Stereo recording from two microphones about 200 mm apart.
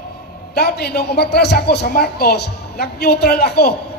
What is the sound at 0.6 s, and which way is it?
A man's voice, 50° left (ahead or behind).